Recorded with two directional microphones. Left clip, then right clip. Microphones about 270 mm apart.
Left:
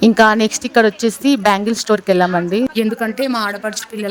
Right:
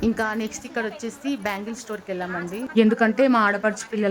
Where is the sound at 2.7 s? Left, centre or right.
Centre.